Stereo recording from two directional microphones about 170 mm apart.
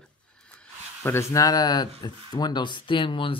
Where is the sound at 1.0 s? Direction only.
15° left (ahead or behind).